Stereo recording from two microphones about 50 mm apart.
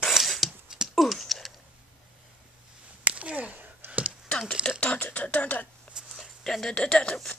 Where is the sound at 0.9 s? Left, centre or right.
Centre.